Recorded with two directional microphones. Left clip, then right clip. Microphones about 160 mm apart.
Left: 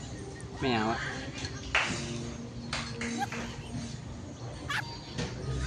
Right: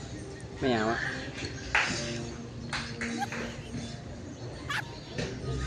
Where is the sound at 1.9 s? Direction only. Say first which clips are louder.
Right 3 dB; 15° right (ahead or behind).